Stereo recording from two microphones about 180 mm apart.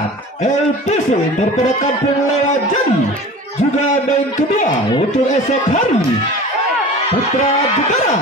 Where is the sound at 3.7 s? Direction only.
40° left (ahead or behind).